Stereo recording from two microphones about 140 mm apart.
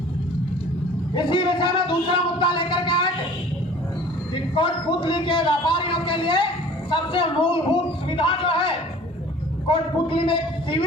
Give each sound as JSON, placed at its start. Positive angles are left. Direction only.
{"t": 1.1, "sound": "a man's voice", "side_deg": 35}
{"t": 4.5, "sound": "a man's voice", "side_deg": 35}